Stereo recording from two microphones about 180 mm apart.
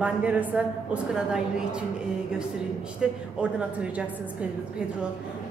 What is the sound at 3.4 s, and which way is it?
Speech, 5° right (ahead or behind).